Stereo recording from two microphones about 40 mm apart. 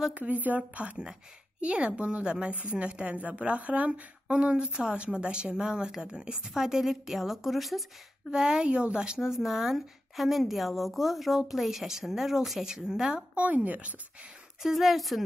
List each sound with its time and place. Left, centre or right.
0.1 s speech: right
0.6 s speech: right
6.5 s a woman's voice: centre
8.3 s speech: centre
8.6 s speech: right
9.2 s a woman's voice: centre
12.6 s speech: centre
13.3 s speech: right
14.6 s a woman's voice: centre